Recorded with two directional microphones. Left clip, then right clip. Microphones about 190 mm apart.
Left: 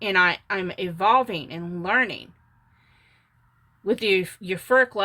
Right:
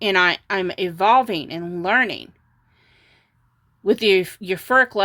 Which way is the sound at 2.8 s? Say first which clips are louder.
Right 5 dB; 50° right (ahead or behind).